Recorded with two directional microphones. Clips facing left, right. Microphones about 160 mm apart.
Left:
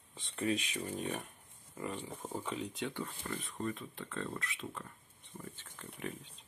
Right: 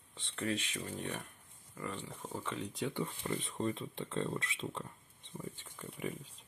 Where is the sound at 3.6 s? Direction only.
25° right (ahead or behind).